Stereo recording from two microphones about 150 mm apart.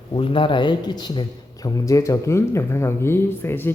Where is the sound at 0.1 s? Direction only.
35° left (ahead or behind).